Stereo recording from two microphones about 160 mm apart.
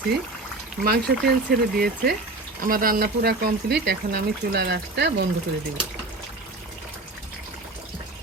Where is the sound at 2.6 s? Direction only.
60° right (ahead or behind); by 5.3 s 90° right.